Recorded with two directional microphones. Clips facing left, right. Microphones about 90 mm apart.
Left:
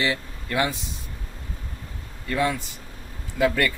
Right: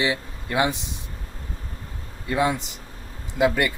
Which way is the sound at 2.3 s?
20° right (ahead or behind).